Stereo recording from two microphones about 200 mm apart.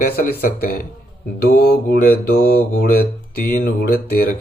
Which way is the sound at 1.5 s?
50° left (ahead or behind).